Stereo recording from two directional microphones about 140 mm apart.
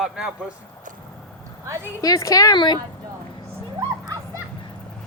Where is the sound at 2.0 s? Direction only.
25° left (ahead or behind).